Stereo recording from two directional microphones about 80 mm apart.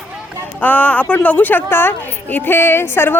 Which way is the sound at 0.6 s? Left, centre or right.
Centre.